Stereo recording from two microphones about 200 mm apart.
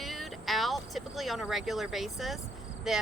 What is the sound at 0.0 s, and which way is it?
Vehicle, centre (ahead or behind).